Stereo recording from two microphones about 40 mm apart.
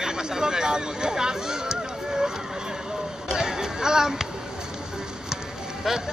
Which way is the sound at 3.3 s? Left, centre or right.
Centre.